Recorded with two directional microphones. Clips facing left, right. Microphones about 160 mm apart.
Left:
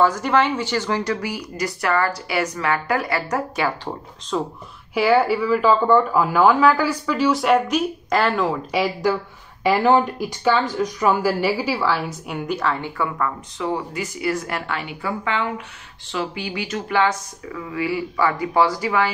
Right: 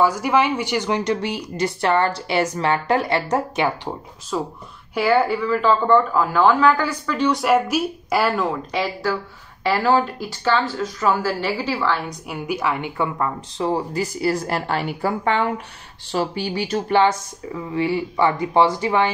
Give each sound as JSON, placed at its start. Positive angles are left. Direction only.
{"t": 0.0, "sound": "speech", "side_deg": -10}
{"t": 4.3, "sound": "speech", "side_deg": -5}
{"t": 8.7, "sound": "speech", "side_deg": 10}